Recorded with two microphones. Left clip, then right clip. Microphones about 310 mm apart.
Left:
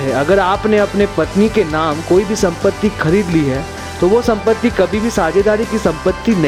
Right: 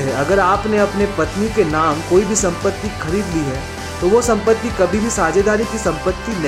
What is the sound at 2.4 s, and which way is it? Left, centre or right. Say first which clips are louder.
Speech: left 4 dB; left.